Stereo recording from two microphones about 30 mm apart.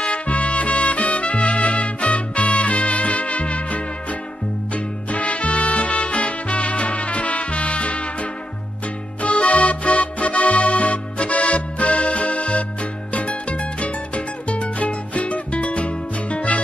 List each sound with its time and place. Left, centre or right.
0.1 s music: left